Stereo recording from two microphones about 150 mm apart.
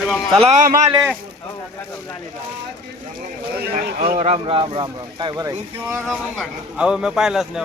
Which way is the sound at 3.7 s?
80° right.